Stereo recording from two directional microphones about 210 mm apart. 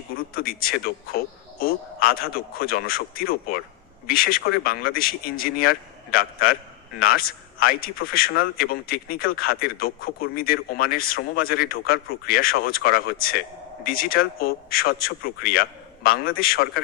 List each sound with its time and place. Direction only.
0.2 s a man's voice: 45° left (ahead or behind)